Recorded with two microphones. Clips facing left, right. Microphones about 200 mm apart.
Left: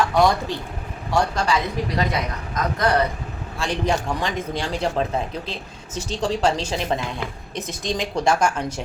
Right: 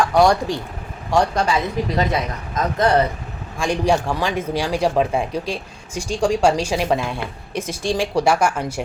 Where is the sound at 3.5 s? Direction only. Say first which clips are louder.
Right 4 dB; 15° right (ahead or behind).